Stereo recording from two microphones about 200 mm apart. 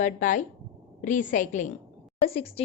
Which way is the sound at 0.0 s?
40° left (ahead or behind).